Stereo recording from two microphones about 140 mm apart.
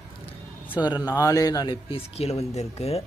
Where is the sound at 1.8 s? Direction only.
45° left (ahead or behind).